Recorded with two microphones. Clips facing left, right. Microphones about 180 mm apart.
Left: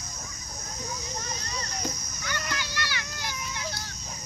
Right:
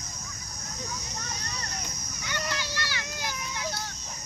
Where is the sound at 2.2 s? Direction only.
25° right (ahead or behind).